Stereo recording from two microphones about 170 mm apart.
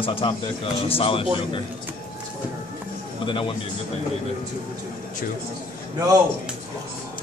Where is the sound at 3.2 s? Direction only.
30° left (ahead or behind).